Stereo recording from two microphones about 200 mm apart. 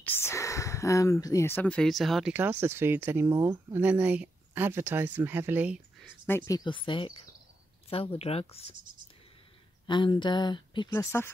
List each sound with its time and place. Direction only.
0.0 s speech: 10° left (ahead or behind); by 6.1 s 5° right (ahead or behind)
6.2 s speech: 10° left (ahead or behind); by 8.7 s 30° left (ahead or behind)
9.8 s speech: 25° left (ahead or behind)
10.9 s speech: 10° left (ahead or behind)